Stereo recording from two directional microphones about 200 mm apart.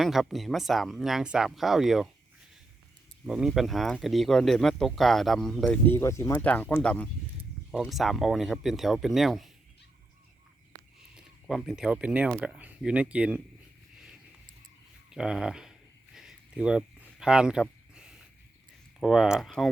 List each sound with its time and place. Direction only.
0.0 s speech: centre (ahead or behind)
3.2 s speech: centre (ahead or behind)
11.1 s speech: centre (ahead or behind)
15.1 s speech: 5° right (ahead or behind)
16.1 s a sound: 5° right (ahead or behind)
18.9 s speech: centre (ahead or behind)